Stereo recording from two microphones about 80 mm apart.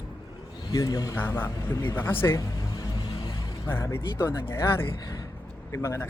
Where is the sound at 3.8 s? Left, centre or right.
Left.